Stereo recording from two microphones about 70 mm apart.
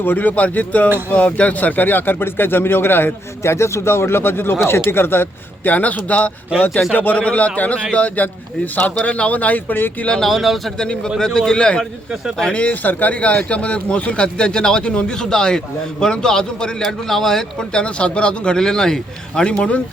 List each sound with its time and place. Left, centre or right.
0.0 s a man's voice: left
10.1 s speech: centre
11.2 s speech: centre